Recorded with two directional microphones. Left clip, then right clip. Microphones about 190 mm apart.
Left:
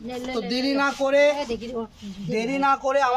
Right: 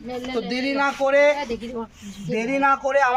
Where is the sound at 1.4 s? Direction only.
55° left (ahead or behind).